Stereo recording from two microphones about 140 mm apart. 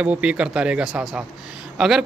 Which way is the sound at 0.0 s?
10° right (ahead or behind).